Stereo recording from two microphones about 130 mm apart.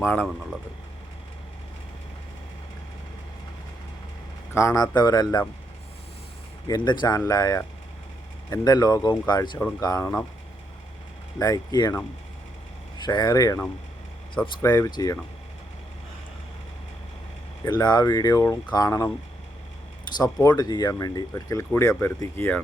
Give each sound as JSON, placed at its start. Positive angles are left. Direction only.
{"t": 0.0, "sound": "speech", "side_deg": 15}
{"t": 4.5, "sound": "speech", "side_deg": 25}
{"t": 6.7, "sound": "speech", "side_deg": 35}
{"t": 8.6, "sound": "speech", "side_deg": 30}
{"t": 11.3, "sound": "speech", "side_deg": 30}
{"t": 13.1, "sound": "speech", "side_deg": 30}
{"t": 17.7, "sound": "speech", "side_deg": 30}
{"t": 20.1, "sound": "speech", "side_deg": 30}